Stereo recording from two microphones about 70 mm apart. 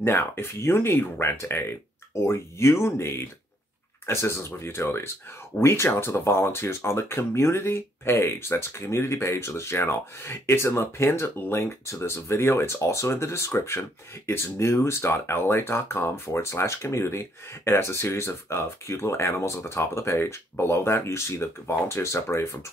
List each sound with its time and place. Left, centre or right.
0.0 s speech: left